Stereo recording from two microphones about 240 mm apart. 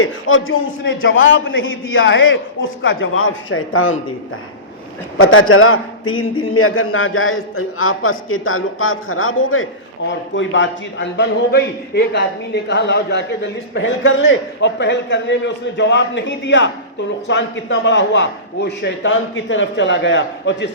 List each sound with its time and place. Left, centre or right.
0.0 s a man's voice: left
5.1 s a man's voice: left